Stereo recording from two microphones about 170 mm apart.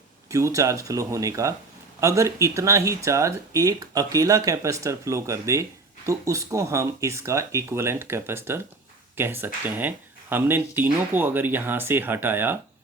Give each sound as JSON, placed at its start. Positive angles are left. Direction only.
{"t": 0.3, "sound": "speech", "side_deg": -20}